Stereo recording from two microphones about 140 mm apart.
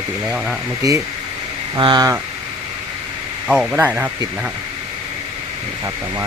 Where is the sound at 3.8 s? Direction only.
15° right (ahead or behind).